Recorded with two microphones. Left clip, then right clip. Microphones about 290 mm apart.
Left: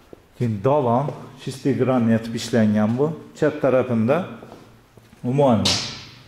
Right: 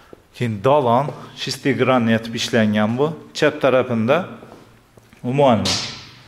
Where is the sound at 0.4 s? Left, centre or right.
Centre.